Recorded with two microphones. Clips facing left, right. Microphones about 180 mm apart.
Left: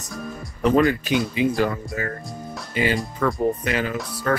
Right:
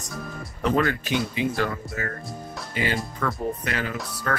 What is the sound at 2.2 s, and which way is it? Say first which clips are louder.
Music: left 2 dB; centre (ahead or behind).